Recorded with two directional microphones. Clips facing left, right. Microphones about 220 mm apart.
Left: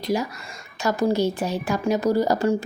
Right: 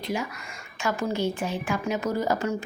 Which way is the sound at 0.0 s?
40° left (ahead or behind).